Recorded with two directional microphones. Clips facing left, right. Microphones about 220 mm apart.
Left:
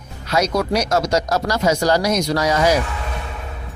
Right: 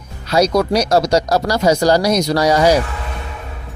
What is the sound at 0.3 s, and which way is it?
Speech, 35° right (ahead or behind).